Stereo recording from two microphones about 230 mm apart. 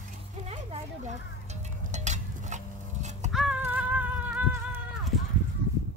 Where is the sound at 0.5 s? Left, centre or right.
Right.